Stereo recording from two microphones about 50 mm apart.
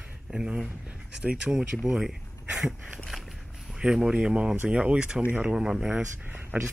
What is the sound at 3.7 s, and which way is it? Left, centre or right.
Speech, centre.